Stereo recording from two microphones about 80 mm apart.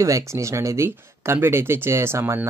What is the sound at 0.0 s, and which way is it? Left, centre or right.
Speech, right.